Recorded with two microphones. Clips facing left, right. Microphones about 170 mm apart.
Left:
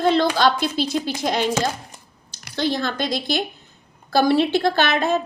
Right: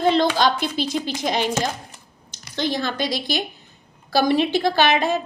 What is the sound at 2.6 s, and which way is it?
Speech, 15° right (ahead or behind).